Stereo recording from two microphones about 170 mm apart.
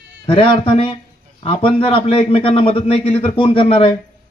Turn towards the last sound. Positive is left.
turn(degrees=30)  # may be behind; listen again after turning